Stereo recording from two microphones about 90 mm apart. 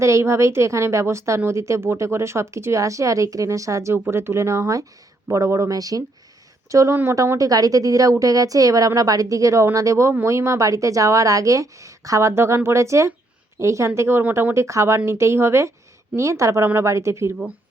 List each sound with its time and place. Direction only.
0.0 s speech: 30° right (ahead or behind)
6.9 s speech: 25° right (ahead or behind)
7.3 s speech: 40° right (ahead or behind)
14.2 s speech: 20° right (ahead or behind)
14.5 s speech: 35° right (ahead or behind)